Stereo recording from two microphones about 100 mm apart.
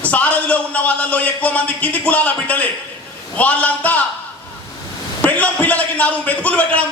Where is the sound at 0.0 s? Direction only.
15° left (ahead or behind).